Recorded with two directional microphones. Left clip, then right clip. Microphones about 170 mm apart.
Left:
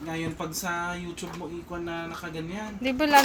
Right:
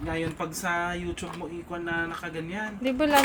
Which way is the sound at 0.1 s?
Centre (ahead or behind).